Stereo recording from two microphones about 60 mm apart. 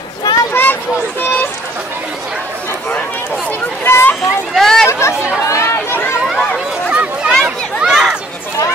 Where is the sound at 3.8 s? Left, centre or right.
Left.